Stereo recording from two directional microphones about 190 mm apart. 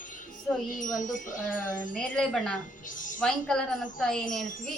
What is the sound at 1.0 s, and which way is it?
Wind chime, 40° left (ahead or behind).